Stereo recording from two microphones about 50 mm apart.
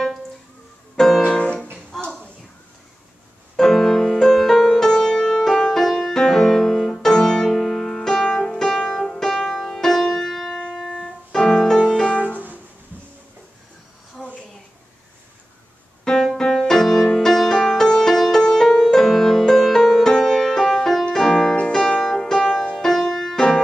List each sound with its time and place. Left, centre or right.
0.9 s music: centre
1.2 s music: left
3.5 s music: centre
10.7 s keyboard: centre
11.8 s music: centre
16.0 s piano: centre
16.3 s music: centre